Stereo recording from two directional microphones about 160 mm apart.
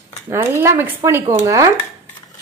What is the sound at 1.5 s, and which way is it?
Dishes, 20° right (ahead or behind).